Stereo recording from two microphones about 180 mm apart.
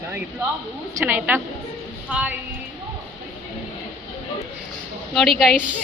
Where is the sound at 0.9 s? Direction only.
10° right (ahead or behind).